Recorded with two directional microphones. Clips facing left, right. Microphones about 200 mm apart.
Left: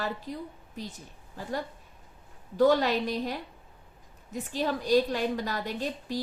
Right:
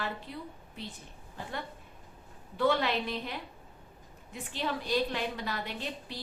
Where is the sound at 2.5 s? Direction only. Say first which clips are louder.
Left 5 dB; 40° left (ahead or behind).